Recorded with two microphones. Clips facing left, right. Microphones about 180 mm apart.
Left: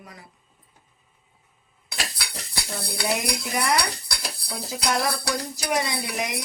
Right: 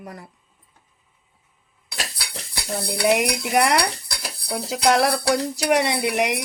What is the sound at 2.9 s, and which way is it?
Stir, 70° right (ahead or behind).